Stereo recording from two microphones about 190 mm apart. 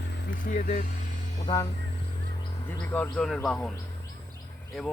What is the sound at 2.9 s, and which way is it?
Speech, 5° left (ahead or behind).